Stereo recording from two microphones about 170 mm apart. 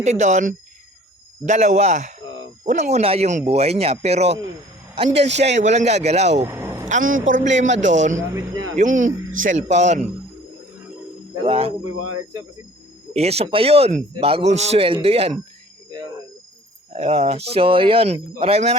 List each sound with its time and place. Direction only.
0.0 s a man's voice: 45° right (ahead or behind)
6.4 s vehicle: 15° right (ahead or behind)
6.8 s speech: 50° right (ahead or behind)
8.3 s speech: 15° right (ahead or behind)
8.8 s speech: 50° right (ahead or behind)
11.4 s a man's voice: 35° right (ahead or behind)
13.1 s a man's voice: 35° right (ahead or behind)
16.9 s a man's voice: 40° right (ahead or behind)